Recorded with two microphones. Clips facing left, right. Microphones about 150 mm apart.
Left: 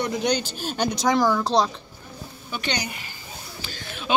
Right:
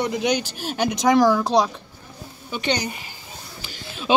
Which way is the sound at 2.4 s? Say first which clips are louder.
Right 4 dB; 25° right (ahead or behind).